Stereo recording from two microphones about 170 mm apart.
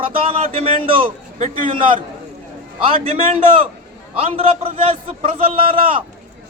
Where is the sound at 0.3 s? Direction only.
35° right (ahead or behind).